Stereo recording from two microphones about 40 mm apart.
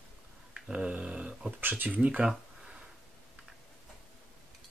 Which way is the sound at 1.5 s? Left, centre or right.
Right.